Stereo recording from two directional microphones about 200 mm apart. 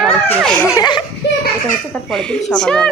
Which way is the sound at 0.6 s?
20° left (ahead or behind).